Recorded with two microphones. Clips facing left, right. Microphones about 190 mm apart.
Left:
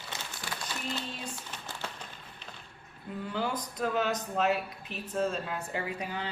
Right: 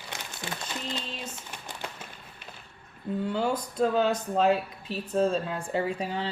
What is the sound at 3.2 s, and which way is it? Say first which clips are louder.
Speech: right 4 dB; 30° right (ahead or behind).